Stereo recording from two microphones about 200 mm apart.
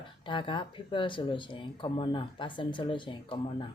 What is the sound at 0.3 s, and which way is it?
Speech, 25° left (ahead or behind).